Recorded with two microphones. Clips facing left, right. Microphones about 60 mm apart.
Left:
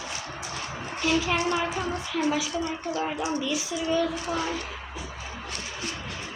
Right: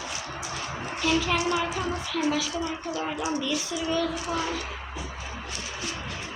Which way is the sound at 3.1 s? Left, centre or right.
Left.